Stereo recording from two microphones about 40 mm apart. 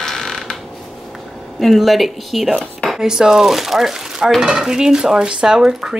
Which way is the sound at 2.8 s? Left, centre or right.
Centre.